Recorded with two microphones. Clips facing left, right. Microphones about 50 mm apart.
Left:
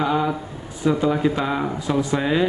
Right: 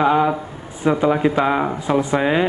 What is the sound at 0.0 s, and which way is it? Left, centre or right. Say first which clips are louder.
Speech: right 5 dB; right.